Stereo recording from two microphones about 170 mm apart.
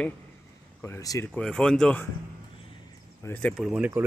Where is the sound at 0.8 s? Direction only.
20° left (ahead or behind).